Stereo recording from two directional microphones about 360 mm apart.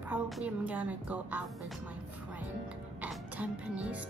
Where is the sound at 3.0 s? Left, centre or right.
Centre.